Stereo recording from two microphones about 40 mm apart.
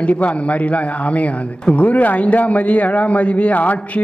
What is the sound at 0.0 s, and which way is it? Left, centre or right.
Speech, left.